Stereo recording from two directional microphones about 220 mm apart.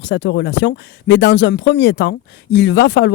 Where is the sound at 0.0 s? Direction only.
55° left (ahead or behind).